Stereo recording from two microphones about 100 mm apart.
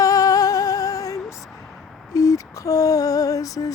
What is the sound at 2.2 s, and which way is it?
Lullaby, 35° left (ahead or behind).